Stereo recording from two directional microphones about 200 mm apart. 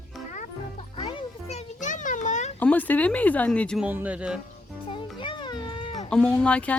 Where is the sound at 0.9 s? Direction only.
25° left (ahead or behind).